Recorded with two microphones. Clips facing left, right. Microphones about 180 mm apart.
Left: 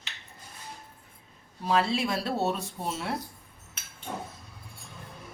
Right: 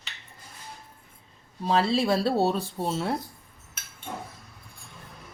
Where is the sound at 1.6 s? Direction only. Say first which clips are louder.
Right 3 dB; 35° right (ahead or behind).